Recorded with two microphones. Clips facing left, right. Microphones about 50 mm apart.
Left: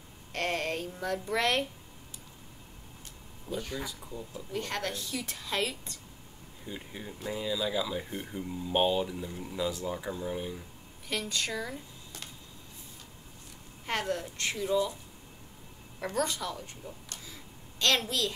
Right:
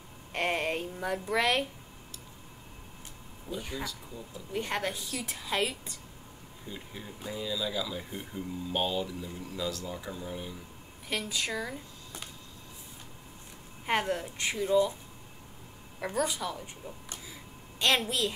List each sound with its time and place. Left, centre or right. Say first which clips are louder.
0.3 s a sound: right 2 dB; centre
1.4 s speech: right 1 dB; centre
3.5 s a woman's voice: left 2 dB; centre
3.8 s speech: even; centre
4.5 s a woman's voice: right 2 dB; centre
6.6 s speech: left 2 dB; centre
11.1 s a woman's voice: even; centre
13.8 s a woman's voice: right 3 dB; centre
16.0 s speech: right 1 dB; centre